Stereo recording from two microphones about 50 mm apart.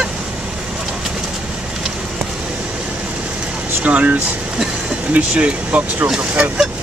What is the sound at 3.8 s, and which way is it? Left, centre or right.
Speech, right.